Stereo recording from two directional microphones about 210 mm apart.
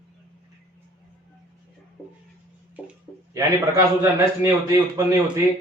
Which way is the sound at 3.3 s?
15° right (ahead or behind).